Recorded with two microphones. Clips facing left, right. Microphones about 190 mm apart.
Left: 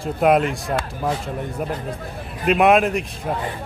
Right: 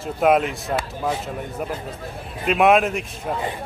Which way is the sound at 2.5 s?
Centre (ahead or behind).